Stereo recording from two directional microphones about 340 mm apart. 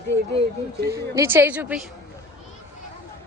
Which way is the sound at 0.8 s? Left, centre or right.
Centre.